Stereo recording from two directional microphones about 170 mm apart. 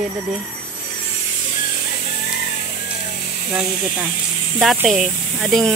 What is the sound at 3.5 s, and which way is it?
Speech, 10° right (ahead or behind).